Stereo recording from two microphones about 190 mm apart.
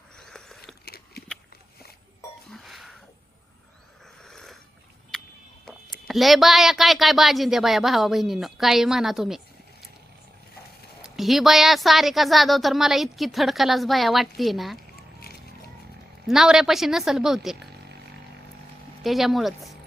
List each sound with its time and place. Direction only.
0.2 s biting: 5° left (ahead or behind)
0.9 s biting: 55° left (ahead or behind)
2.5 s a sound: centre (ahead or behind)
4.2 s a sound: centre (ahead or behind)
5.6 s speech: centre (ahead or behind)
11.0 s speech: centre (ahead or behind)
14.9 s a sound: 55° left (ahead or behind)
16.2 s speech: centre (ahead or behind)
19.0 s speech: centre (ahead or behind)